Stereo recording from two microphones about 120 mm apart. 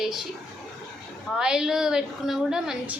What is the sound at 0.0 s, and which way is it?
Speech, centre (ahead or behind).